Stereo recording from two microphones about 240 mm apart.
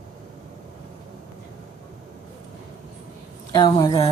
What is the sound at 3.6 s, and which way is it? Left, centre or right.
Speech, centre.